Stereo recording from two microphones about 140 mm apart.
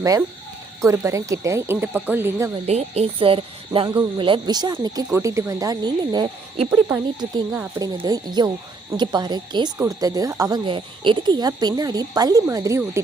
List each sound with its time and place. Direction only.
0.8 s speech: 20° right (ahead or behind)
2.6 s speech: 50° right (ahead or behind); by 6.2 s 30° right (ahead or behind)
6.7 s speech: 15° right (ahead or behind)
7.9 s speech: 30° right (ahead or behind)